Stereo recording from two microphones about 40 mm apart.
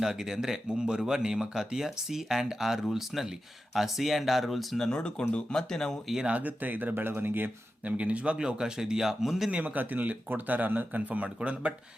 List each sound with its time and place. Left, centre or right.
0.0 s speech: centre
3.1 s speech: centre
4.8 s speech: left
6.3 s speech: right
7.9 s a man's voice: right
8.4 s speech: centre
9.5 s a man's voice: right
9.8 s speech: right